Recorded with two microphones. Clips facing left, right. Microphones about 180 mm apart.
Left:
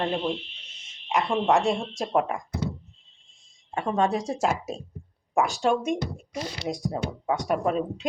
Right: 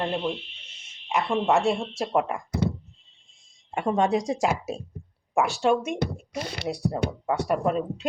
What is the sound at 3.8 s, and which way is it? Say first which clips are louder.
Speech: right 2 dB; 15° right (ahead or behind).